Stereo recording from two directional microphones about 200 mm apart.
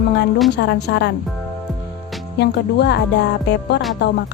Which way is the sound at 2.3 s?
55° left (ahead or behind).